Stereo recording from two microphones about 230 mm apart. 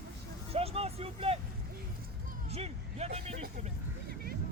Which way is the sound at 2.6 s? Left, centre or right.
Right.